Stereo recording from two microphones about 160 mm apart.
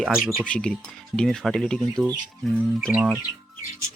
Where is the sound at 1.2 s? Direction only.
Centre (ahead or behind).